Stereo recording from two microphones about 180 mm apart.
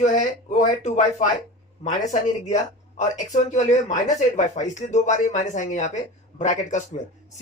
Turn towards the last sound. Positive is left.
turn(degrees=40)  # may be behind; listen again after turning